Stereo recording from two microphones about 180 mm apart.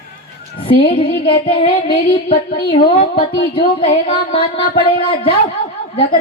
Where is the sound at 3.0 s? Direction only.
60° left (ahead or behind).